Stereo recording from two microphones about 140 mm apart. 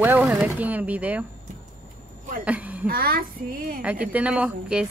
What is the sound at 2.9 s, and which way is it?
Speech, 90° right.